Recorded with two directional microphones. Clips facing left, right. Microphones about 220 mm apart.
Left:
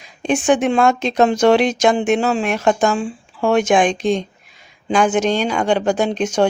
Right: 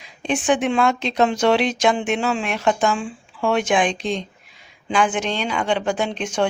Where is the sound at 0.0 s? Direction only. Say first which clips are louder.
Left 4 dB; 45° left (ahead or behind).